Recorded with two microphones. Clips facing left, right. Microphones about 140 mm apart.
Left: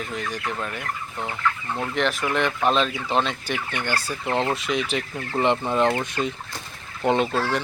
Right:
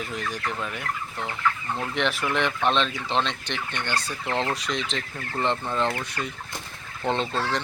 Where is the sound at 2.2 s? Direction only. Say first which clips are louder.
Left 2 dB; 5° left (ahead or behind).